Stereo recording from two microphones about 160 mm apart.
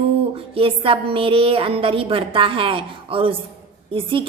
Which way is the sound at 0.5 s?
35° right (ahead or behind).